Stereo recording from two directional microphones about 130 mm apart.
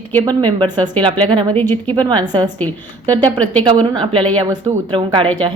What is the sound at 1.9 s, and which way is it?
Speech, 35° right (ahead or behind).